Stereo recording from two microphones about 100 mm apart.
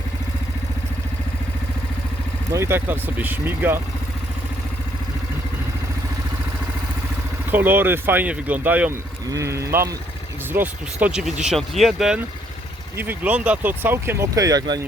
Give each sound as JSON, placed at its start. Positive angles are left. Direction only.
{"t": 2.5, "sound": "speech", "side_deg": -25}
{"t": 7.5, "sound": "speech", "side_deg": -20}
{"t": 9.3, "sound": "speech", "side_deg": -30}
{"t": 10.5, "sound": "speech", "side_deg": -20}
{"t": 11.1, "sound": "speech", "side_deg": -5}
{"t": 13.0, "sound": "speech", "side_deg": -20}
{"t": 14.3, "sound": "speech", "side_deg": -40}